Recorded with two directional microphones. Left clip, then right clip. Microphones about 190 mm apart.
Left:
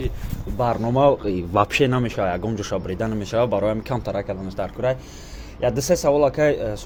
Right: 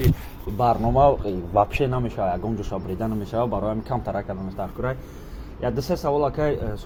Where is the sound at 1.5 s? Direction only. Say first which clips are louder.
Left 2 dB; 45° left (ahead or behind).